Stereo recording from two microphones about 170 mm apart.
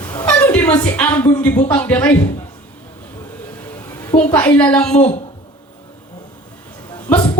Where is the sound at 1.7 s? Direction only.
10° left (ahead or behind).